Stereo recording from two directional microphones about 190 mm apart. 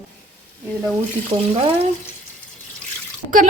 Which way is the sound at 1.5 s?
30° right (ahead or behind).